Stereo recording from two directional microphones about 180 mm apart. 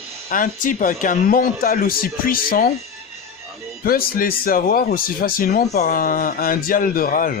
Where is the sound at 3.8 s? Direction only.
55° left (ahead or behind).